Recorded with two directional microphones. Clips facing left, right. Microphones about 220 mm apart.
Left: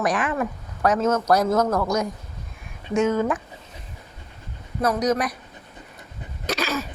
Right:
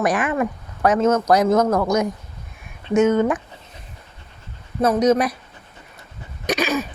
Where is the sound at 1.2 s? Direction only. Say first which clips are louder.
Right 3 dB; 20° right (ahead or behind).